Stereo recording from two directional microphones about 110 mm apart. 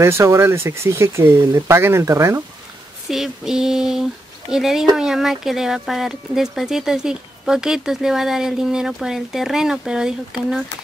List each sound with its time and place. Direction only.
0.0 s speech: 25° right (ahead or behind)
3.1 s speech: 5° right (ahead or behind)